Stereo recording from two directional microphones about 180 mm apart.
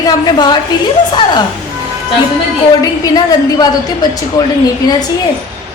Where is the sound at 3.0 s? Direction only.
20° left (ahead or behind).